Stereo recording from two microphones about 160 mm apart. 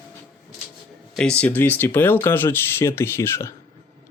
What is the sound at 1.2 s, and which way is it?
Speech, 5° left (ahead or behind).